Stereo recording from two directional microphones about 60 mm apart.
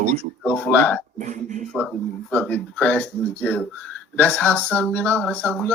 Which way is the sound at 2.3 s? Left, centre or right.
Left.